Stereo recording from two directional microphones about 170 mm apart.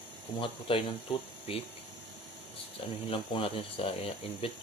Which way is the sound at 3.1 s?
30° left (ahead or behind).